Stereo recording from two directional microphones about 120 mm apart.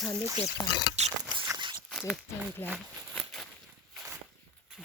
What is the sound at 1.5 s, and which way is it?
Walk, 40° right (ahead or behind).